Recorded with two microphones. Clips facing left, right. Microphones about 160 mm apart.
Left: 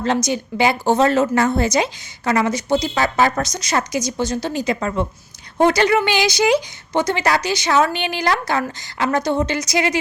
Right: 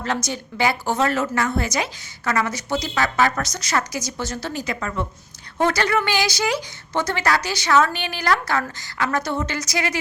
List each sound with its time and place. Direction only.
0.0 s a woman's voice: 20° left (ahead or behind)
3.0 s speech: 30° left (ahead or behind)
3.4 s a woman's voice: 15° left (ahead or behind)